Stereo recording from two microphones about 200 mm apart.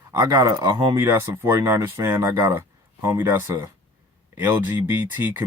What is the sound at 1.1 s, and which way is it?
Speech, 10° right (ahead or behind).